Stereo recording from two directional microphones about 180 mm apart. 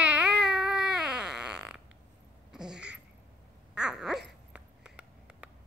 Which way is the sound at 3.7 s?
5° right (ahead or behind).